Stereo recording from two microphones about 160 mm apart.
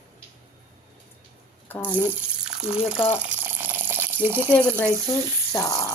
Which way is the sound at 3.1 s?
10° right (ahead or behind).